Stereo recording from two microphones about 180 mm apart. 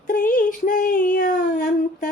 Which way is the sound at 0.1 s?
50° left (ahead or behind).